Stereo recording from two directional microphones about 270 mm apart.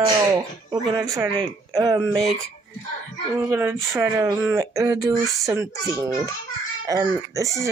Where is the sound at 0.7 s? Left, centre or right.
Centre.